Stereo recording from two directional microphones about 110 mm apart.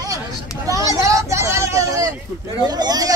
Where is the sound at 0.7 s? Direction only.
30° right (ahead or behind).